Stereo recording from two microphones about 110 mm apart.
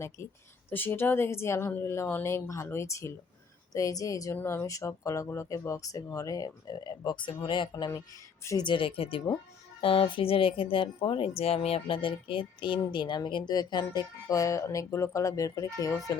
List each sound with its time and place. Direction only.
0.7 s a woman's voice: 20° left (ahead or behind)